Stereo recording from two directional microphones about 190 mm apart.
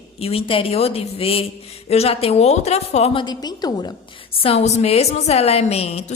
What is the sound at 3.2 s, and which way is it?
Speech, 20° left (ahead or behind).